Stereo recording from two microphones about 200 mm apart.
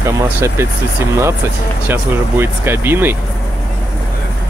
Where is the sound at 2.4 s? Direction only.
10° right (ahead or behind).